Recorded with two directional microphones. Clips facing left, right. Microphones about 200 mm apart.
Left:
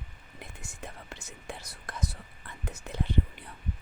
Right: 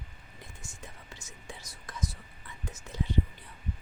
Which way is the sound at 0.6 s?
65° left (ahead or behind).